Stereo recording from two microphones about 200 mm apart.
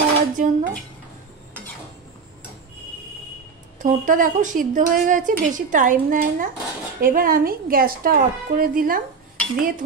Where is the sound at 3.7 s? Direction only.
40° right (ahead or behind).